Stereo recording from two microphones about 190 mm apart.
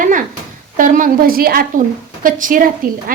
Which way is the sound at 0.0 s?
45° right (ahead or behind).